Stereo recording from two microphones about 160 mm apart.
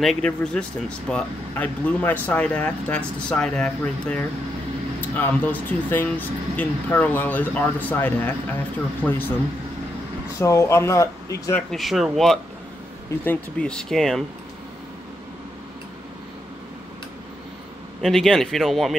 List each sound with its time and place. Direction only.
0.0 s speech: 5° left (ahead or behind)
10.4 s speech: 20° left (ahead or behind)
11.7 s speech: centre (ahead or behind)
18.0 s speech: centre (ahead or behind)